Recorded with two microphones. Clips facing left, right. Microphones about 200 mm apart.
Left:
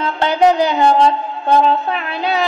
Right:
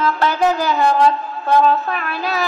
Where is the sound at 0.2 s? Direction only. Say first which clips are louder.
Left 8 dB; 25° left (ahead or behind).